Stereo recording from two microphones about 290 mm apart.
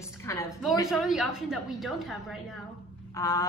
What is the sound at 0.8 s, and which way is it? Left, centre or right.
A woman's voice, centre.